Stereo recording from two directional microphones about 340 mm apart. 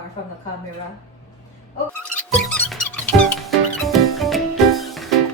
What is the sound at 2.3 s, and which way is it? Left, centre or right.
Music, centre.